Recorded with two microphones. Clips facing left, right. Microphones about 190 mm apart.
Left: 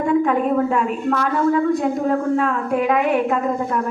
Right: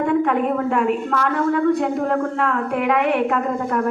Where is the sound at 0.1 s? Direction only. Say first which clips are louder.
Left 4 dB; 60° right (ahead or behind).